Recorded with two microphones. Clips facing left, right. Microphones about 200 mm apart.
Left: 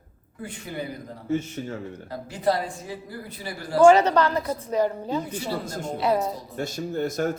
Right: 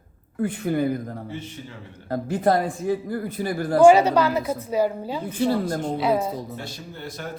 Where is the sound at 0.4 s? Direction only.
55° right (ahead or behind).